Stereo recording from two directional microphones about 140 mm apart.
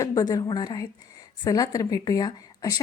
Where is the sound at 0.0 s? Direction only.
25° left (ahead or behind).